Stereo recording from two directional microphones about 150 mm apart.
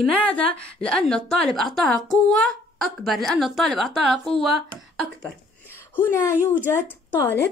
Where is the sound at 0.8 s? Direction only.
5° left (ahead or behind).